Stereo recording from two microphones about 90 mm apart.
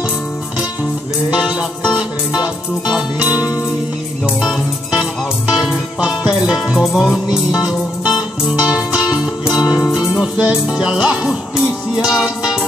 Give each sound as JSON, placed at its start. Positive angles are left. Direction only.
{"t": 1.3, "sound": "music", "side_deg": -10}
{"t": 9.6, "sound": "music", "side_deg": 50}
{"t": 9.9, "sound": "music", "side_deg": -10}